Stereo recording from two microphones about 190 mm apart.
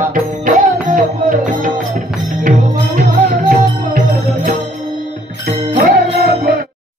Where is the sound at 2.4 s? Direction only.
50° right (ahead or behind).